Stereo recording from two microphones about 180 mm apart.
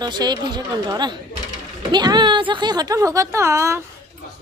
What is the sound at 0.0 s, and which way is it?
A woman's voice, 25° right (ahead or behind).